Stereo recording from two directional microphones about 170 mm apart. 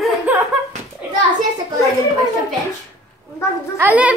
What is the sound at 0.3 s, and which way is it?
Slap, 10° right (ahead or behind).